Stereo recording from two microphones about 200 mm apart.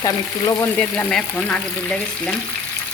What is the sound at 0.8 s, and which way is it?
Speech, 5° left (ahead or behind).